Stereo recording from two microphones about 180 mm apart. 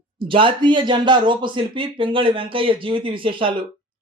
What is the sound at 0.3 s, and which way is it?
Speech, 30° right (ahead or behind).